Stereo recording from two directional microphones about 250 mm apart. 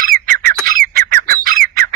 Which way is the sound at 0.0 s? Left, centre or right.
Right.